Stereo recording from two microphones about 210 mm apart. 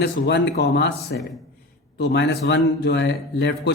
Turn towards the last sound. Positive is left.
turn(degrees=55)  # may be behind; listen again after turning